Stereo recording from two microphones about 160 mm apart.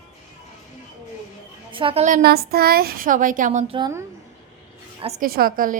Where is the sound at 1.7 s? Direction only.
35° right (ahead or behind).